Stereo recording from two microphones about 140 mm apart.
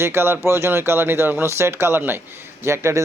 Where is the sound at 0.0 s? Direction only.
15° right (ahead or behind).